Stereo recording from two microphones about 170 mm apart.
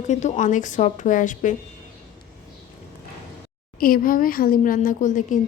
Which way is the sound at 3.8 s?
55° left (ahead or behind).